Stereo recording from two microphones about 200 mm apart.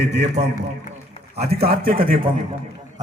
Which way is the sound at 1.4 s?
50° right (ahead or behind).